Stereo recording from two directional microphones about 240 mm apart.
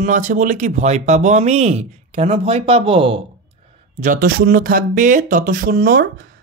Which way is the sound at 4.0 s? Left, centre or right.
Right.